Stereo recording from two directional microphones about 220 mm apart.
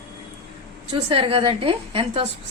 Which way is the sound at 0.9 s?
25° right (ahead or behind).